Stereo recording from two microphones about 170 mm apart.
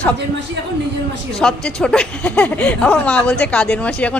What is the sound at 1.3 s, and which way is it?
Speech, 5° left (ahead or behind).